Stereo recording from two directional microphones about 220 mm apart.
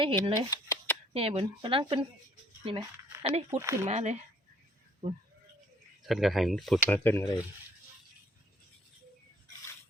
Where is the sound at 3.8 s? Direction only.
30° right (ahead or behind).